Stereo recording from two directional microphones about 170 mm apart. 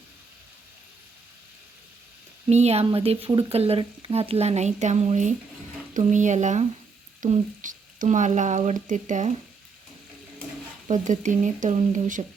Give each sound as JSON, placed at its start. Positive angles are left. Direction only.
{"t": 2.5, "sound": "speech", "side_deg": -40}
{"t": 10.8, "sound": "speech", "side_deg": -45}